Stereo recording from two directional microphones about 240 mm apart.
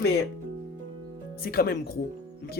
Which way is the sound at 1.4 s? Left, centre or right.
Left.